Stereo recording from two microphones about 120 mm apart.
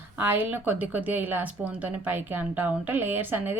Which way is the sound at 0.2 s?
15° right (ahead or behind).